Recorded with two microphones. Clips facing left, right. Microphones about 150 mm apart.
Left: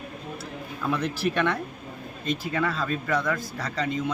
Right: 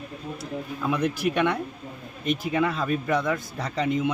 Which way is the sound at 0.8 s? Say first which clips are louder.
Right 1 dB; 15° right (ahead or behind).